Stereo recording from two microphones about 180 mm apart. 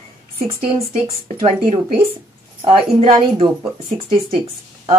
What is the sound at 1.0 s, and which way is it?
Speech, 30° right (ahead or behind).